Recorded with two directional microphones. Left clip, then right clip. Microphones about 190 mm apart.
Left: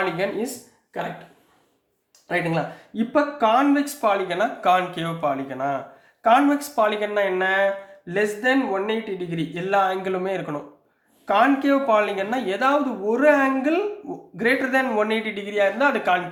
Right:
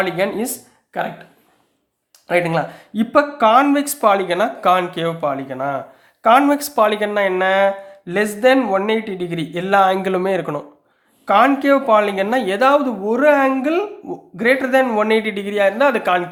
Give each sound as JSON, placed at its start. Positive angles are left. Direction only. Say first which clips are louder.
{"t": 0.2, "sound": "speech", "louder": "right 6 dB", "side_deg": -40}
{"t": 2.2, "sound": "speech", "louder": "right 6 dB", "side_deg": -45}
{"t": 6.2, "sound": "speech", "louder": "right 5 dB", "side_deg": -35}